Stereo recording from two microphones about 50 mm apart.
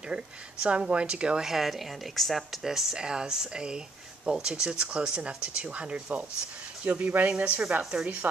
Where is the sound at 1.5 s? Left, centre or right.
Centre.